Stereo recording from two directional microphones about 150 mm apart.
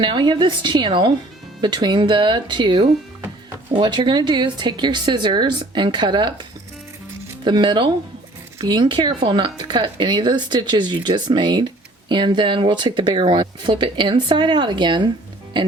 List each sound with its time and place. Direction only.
0.0 s a woman's voice: 30° right (ahead or behind)
7.4 s speech: 30° right (ahead or behind)